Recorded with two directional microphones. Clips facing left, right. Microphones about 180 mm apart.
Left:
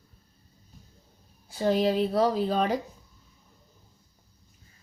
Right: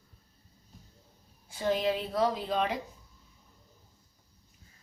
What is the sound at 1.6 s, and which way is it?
A woman's voice, 40° left (ahead or behind).